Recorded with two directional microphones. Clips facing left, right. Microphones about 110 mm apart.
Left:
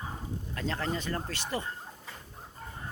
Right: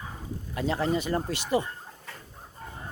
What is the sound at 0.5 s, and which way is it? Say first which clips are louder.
Speech: right 7 dB; 15° right (ahead or behind).